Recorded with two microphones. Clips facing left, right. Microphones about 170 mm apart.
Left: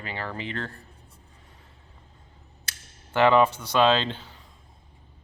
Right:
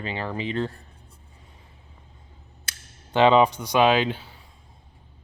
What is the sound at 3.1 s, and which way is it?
Speech, 20° right (ahead or behind).